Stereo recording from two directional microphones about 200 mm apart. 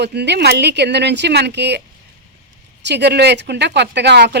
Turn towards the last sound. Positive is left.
turn(degrees=-55)  # may be behind; listen again after turning